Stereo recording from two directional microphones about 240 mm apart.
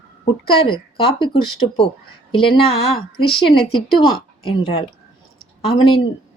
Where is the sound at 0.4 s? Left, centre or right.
Left.